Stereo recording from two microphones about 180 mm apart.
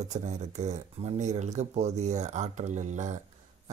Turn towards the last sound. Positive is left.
turn(degrees=-40)  # may be behind; listen again after turning